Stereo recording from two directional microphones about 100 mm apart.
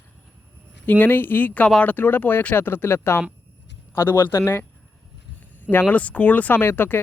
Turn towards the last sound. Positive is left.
turn(degrees=20)  # may be behind; listen again after turning